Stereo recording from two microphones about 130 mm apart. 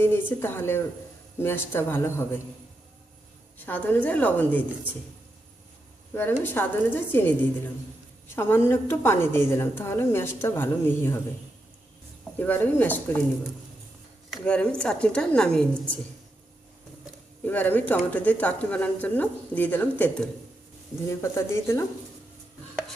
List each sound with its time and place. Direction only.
0.0 s speech: 15° left (ahead or behind)
3.7 s speech: 15° left (ahead or behind)
6.1 s speech: 15° left (ahead or behind)
8.4 s speech: 20° left (ahead or behind)
12.4 s speech: 15° left (ahead or behind)
14.4 s speech: 10° left (ahead or behind)
17.4 s speech: 15° left (ahead or behind)